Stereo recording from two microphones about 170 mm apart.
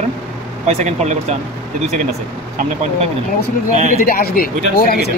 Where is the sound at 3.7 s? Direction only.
45° right (ahead or behind).